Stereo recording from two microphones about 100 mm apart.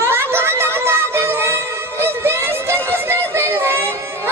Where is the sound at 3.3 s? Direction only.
25° right (ahead or behind).